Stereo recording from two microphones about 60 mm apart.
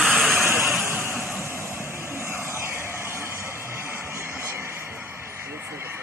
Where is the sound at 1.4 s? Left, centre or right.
Right.